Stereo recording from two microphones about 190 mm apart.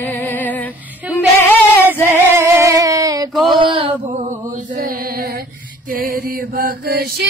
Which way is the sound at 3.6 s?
30° right (ahead or behind).